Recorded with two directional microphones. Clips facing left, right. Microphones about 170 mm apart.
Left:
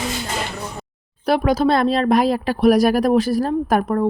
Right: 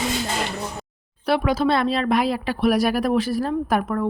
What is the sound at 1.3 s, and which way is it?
Speech, 40° left (ahead or behind).